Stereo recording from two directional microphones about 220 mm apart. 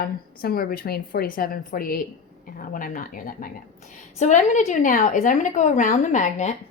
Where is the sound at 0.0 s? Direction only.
45° left (ahead or behind).